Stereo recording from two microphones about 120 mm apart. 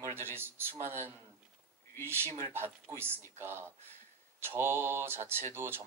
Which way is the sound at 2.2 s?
20° left (ahead or behind).